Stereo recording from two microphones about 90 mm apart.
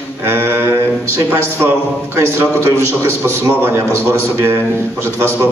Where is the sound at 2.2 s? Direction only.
30° right (ahead or behind).